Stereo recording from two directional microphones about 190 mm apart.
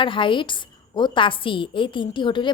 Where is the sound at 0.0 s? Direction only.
25° left (ahead or behind).